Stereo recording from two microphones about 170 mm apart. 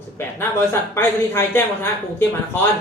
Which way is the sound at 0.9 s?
15° left (ahead or behind).